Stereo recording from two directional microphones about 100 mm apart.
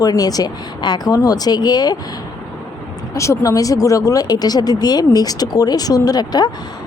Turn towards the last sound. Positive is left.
turn(degrees=40)  # may be behind; listen again after turning